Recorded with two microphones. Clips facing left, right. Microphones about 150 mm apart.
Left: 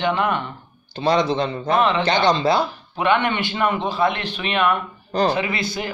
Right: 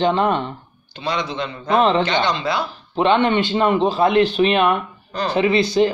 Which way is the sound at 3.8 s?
35° right (ahead or behind).